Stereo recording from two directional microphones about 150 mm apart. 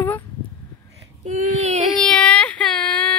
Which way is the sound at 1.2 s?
50° right (ahead or behind).